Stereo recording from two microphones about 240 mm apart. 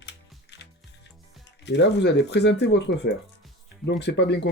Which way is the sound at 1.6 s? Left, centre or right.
Left.